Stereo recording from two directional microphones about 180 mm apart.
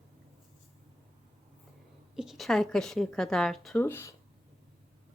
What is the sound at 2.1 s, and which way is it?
A woman's voice, centre (ahead or behind).